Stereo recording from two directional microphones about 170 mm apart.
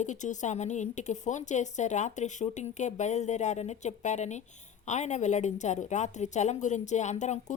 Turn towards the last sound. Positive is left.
turn(degrees=45)  # may be behind; listen again after turning